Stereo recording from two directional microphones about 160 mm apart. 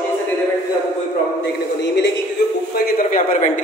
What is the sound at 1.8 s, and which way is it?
Speech, 90° left.